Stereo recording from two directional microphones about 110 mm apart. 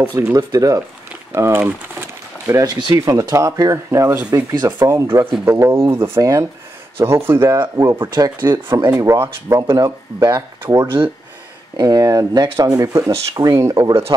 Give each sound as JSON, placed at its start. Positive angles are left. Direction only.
{"t": 0.3, "sound": "speech", "side_deg": -30}
{"t": 1.3, "sound": "crumpling", "side_deg": -25}
{"t": 2.6, "sound": "speech", "side_deg": -35}
{"t": 7.5, "sound": "speech", "side_deg": -40}
{"t": 7.8, "sound": "speech", "side_deg": -20}
{"t": 8.1, "sound": "speech", "side_deg": -40}
{"t": 9.0, "sound": "speech", "side_deg": -25}